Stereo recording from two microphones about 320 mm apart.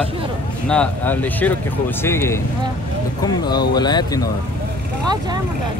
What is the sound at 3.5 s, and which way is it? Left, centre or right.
Speech, centre.